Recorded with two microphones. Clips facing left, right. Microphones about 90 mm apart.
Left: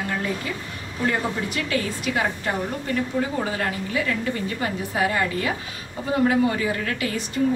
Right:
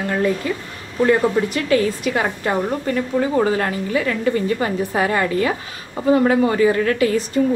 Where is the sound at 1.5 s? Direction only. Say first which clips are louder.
Right 8 dB; 45° right (ahead or behind).